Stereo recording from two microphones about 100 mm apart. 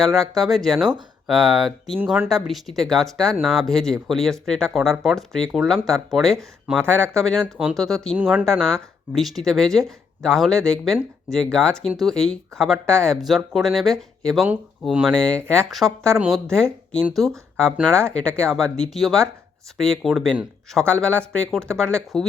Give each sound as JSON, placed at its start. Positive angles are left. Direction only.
{"t": 0.0, "sound": "speech", "side_deg": 0}
{"t": 6.7, "sound": "speech", "side_deg": 10}
{"t": 8.2, "sound": "speech", "side_deg": -10}
{"t": 8.4, "sound": "speech", "side_deg": 5}
{"t": 20.7, "sound": "speech", "side_deg": 10}